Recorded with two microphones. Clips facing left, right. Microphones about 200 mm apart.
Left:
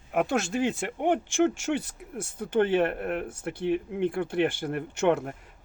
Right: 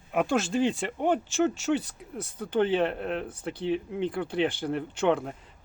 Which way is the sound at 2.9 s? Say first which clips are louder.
Left 1 dB; 10° left (ahead or behind).